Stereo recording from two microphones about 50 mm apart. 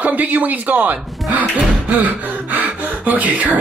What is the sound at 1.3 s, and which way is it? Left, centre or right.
Gasp, right.